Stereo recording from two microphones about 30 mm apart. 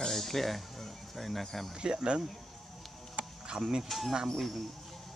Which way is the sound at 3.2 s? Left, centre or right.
Right.